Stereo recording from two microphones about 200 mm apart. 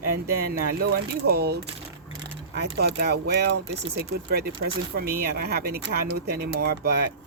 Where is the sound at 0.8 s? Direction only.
50° right (ahead or behind).